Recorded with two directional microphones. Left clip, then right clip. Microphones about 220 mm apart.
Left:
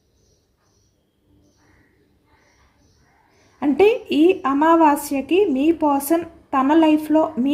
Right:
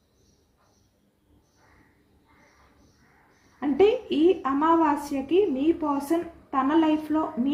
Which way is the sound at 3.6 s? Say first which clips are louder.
Left 5 dB; 55° left (ahead or behind).